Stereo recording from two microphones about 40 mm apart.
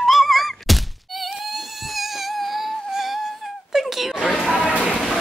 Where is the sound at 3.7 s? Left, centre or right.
Centre.